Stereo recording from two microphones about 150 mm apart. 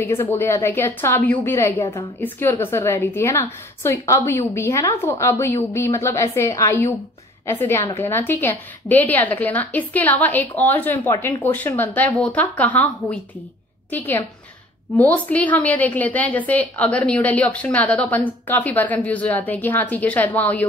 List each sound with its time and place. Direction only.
0.0 s a woman's voice: 15° left (ahead or behind)